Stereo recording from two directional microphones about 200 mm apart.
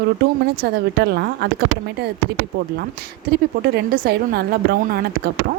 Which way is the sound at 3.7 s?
50° right (ahead or behind).